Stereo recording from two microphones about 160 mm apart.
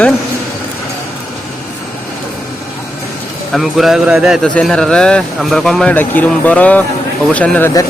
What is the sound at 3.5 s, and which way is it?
A man's voice, centre (ahead or behind).